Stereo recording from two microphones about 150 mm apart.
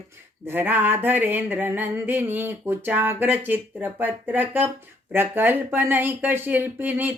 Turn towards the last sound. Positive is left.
turn(degrees=-15)  # may be behind; listen again after turning